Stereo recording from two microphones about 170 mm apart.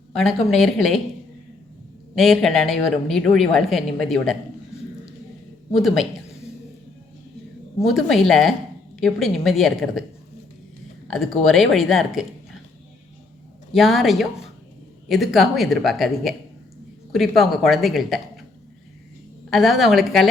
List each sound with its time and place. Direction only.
0.5 s a woman's voice: centre (ahead or behind)
2.1 s a woman's voice: centre (ahead or behind)
5.7 s a woman's voice: centre (ahead or behind)
7.8 s a woman's voice: centre (ahead or behind)
11.4 s a woman's voice: centre (ahead or behind)
13.7 s a woman's voice: centre (ahead or behind)
19.5 s a woman's voice: centre (ahead or behind)